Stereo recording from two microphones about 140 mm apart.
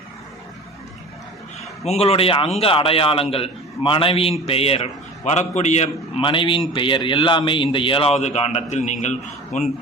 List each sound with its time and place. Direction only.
1.8 s a man's voice: 45° left (ahead or behind)
6.2 s a man's voice: 35° left (ahead or behind); by 9.7 s 55° left (ahead or behind)